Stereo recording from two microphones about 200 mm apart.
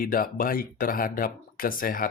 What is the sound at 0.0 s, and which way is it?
Speech, 45° left (ahead or behind).